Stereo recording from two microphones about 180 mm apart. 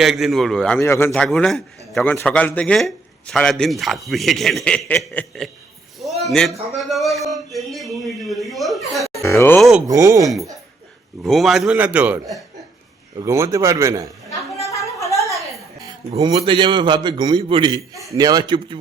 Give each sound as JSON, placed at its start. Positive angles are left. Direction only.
{"t": 0.0, "sound": "a man's voice", "side_deg": 0}
{"t": 0.8, "sound": "a man's voice", "side_deg": 15}
{"t": 6.0, "sound": "a sound", "side_deg": 0}
{"t": 6.7, "sound": "a man's voice", "side_deg": 0}
{"t": 9.8, "sound": "a man's voice", "side_deg": -15}
{"t": 11.2, "sound": "a man's voice", "side_deg": 0}
{"t": 13.1, "sound": "a man's voice", "side_deg": -15}
{"t": 14.3, "sound": "a sound", "side_deg": 15}
{"t": 15.8, "sound": "a sound", "side_deg": -20}
{"t": 16.3, "sound": "a man's voice", "side_deg": -25}